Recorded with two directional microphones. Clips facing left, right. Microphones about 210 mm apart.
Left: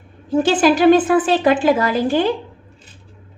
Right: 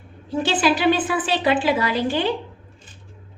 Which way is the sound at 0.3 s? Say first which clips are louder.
Left 6 dB; 45° left (ahead or behind).